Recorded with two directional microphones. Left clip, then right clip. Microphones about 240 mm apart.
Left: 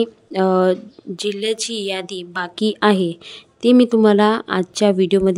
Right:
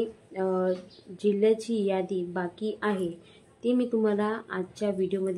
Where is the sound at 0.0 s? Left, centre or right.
Left.